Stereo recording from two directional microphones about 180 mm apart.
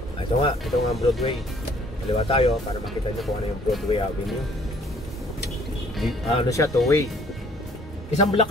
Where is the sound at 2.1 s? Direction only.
30° left (ahead or behind).